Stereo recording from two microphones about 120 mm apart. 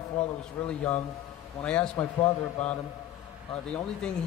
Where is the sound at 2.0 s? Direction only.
20° left (ahead or behind).